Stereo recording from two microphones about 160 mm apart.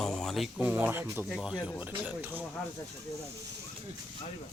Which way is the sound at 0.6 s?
10° right (ahead or behind).